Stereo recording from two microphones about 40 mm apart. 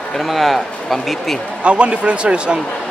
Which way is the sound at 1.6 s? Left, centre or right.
Right.